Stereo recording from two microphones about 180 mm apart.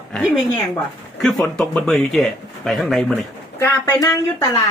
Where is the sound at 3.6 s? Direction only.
15° left (ahead or behind).